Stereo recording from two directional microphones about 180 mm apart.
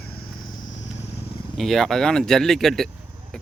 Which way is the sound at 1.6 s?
Centre (ahead or behind).